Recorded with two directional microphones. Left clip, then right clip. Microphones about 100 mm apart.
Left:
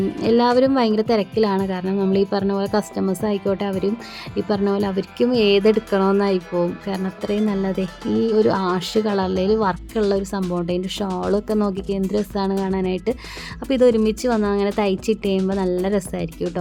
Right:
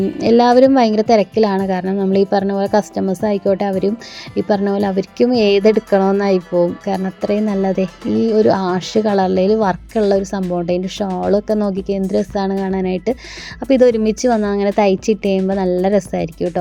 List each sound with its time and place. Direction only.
0.2 s a woman's voice: 30° right (ahead or behind)